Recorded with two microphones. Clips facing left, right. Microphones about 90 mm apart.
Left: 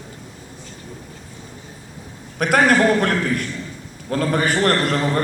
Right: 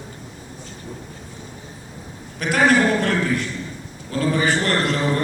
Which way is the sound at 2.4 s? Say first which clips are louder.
Left 2 dB; 45° left (ahead or behind).